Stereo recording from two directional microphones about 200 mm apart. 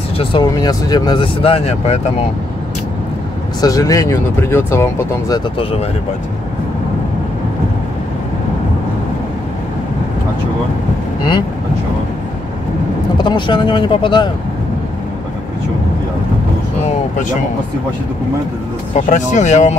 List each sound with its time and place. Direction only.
0.2 s speech: 25° left (ahead or behind)
3.6 s speech: 15° left (ahead or behind)
5.6 s speech: 30° left (ahead or behind)
13.2 s speech: 20° left (ahead or behind)
18.9 s speech: 35° left (ahead or behind)